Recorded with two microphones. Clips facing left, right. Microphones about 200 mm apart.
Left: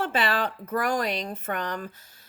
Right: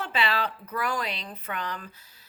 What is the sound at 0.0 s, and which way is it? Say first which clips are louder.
Speech: left 3 dB; 50° left (ahead or behind).